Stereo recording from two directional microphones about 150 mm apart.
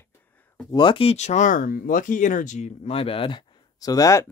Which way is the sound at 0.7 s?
30° left (ahead or behind).